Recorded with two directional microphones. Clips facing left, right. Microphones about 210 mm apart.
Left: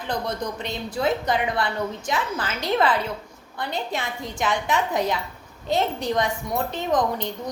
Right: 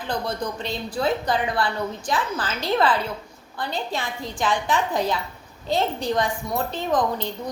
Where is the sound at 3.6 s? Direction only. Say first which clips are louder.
Even; 20° left (ahead or behind).